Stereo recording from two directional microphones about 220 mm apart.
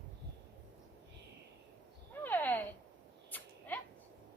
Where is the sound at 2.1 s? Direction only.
10° left (ahead or behind).